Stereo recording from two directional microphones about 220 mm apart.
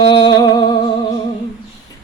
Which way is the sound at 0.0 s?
20° left (ahead or behind).